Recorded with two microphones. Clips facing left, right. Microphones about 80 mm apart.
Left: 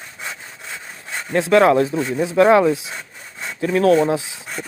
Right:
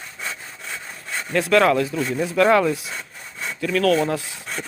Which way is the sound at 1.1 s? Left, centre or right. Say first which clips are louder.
Left 3 dB; left.